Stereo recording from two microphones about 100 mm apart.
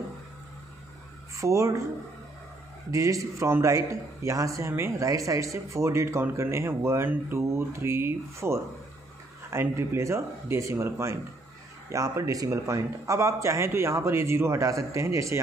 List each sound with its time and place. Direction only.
1.3 s speech: 30° right (ahead or behind)
2.9 s a man's voice: 35° right (ahead or behind)